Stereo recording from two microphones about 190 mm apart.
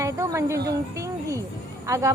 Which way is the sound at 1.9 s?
15° right (ahead or behind).